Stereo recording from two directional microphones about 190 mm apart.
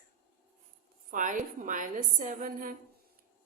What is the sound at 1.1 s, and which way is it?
A woman's voice, 45° right (ahead or behind).